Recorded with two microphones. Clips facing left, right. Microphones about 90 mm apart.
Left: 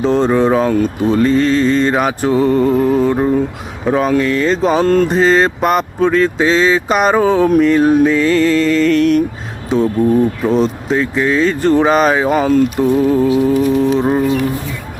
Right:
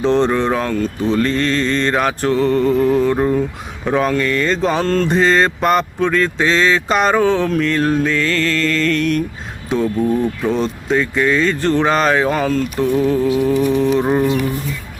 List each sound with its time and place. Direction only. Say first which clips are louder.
0.0 s speech: left 3 dB; 5° left (ahead or behind)
10.0 s mantra: left 5 dB; centre (ahead or behind)
10.4 s speech: left 4 dB; centre (ahead or behind)
13.2 s music: left 3 dB; 25° left (ahead or behind)
13.6 s mantra: left 2 dB; centre (ahead or behind)